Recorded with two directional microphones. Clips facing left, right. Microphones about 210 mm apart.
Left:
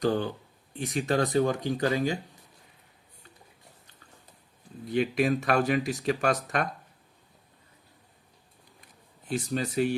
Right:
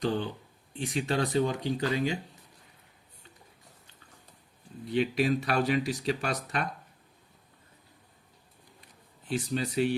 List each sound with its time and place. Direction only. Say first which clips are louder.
0.0 s speech: left 3 dB; 45° left (ahead or behind)
4.9 s speech: left 1 dB; 45° left (ahead or behind)
9.2 s speech: left 1 dB; 45° left (ahead or behind)